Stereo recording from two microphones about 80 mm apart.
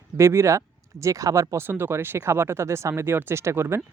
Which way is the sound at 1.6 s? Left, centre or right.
Right.